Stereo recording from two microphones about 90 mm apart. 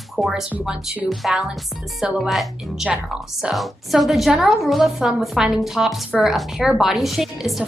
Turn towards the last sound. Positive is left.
turn(degrees=-5)  # may be behind; listen again after turning